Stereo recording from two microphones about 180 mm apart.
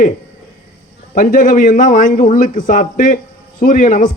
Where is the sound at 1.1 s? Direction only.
50° left (ahead or behind).